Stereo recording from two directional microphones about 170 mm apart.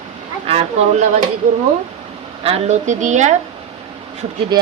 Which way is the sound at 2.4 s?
40° right (ahead or behind).